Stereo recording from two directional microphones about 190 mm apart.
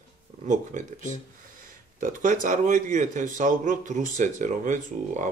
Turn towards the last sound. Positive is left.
turn(degrees=-40)  # may be behind; listen again after turning